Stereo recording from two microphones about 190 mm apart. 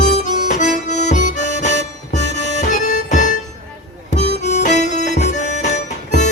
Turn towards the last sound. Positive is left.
turn(degrees=40)  # may be behind; listen again after turning